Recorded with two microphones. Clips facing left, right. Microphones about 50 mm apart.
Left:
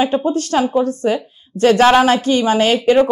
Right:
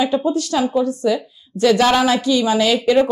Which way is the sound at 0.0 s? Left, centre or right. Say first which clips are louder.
Left 1 dB; left.